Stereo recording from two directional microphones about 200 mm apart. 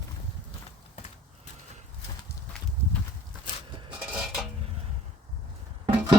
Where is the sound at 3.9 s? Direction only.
5° right (ahead or behind).